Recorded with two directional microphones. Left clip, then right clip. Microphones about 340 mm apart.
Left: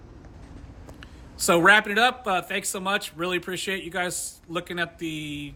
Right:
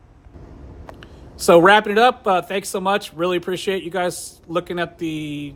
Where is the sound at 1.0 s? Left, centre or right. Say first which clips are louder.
Left 1 dB; centre.